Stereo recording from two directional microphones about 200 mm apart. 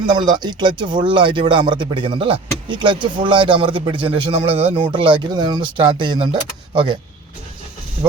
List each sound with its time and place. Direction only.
0.0 s speech: 20° right (ahead or behind)